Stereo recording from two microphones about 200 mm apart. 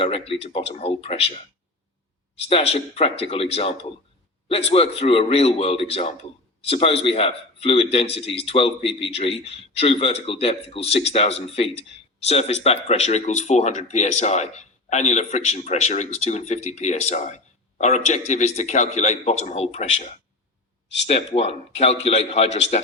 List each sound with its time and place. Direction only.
0.0 s a man's voice: 30° left (ahead or behind)